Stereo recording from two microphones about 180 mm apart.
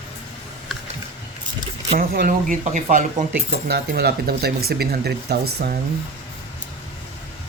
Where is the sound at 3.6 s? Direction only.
60° right (ahead or behind).